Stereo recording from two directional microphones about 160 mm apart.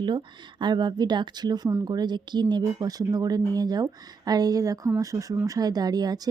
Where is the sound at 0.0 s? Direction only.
30° right (ahead or behind).